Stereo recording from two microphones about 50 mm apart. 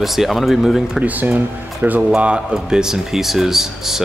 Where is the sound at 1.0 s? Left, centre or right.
Right.